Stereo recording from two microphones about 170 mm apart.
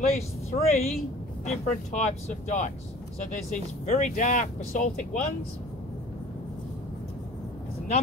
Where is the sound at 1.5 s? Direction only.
45° left (ahead or behind).